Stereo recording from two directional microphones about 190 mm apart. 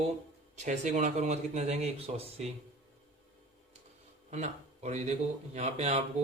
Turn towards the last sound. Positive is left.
turn(degrees=-35)  # may be behind; listen again after turning